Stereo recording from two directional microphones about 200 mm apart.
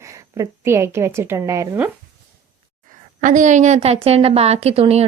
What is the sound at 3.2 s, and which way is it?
A woman's voice, 40° right (ahead or behind).